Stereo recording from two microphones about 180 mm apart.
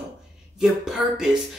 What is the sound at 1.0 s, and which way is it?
Speech, 5° right (ahead or behind).